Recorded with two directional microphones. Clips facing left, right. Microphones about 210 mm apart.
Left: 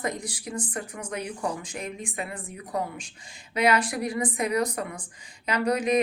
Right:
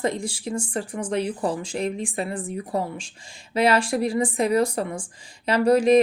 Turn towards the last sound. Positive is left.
turn(degrees=-30)  # may be behind; listen again after turning